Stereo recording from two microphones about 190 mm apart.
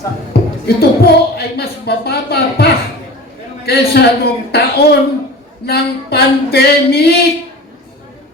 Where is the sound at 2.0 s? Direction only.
55° left (ahead or behind).